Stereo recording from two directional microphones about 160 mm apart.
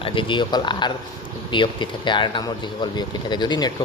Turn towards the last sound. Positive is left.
turn(degrees=25)  # may be behind; listen again after turning